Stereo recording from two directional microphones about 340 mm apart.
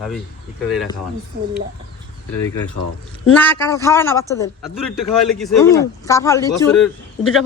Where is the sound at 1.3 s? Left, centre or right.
Right.